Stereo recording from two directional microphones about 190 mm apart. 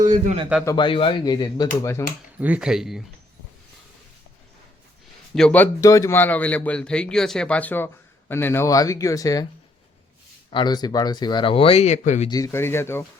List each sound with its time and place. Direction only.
0.0 s a man's voice: 40° right (ahead or behind)
0.6 s speech: 20° left (ahead or behind)
2.4 s speech: 5° right (ahead or behind)
5.3 s speech: 5° left (ahead or behind)
5.8 s speech: 15° left (ahead or behind)
10.5 s speech: 25° left (ahead or behind)
12.3 s speech: 15° left (ahead or behind)